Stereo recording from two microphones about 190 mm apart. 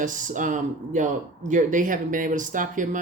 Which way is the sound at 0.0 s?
45° right (ahead or behind).